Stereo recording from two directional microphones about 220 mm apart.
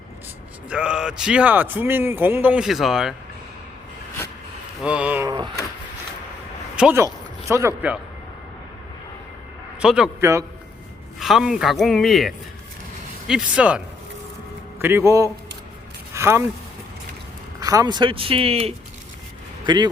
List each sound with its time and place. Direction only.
0.7 s a man's voice: 5° right (ahead or behind)
4.8 s speech: 5° right (ahead or behind)
6.7 s speech: 10° right (ahead or behind)
9.8 s a man's voice: 5° right (ahead or behind)
17.6 s speech: 15° right (ahead or behind)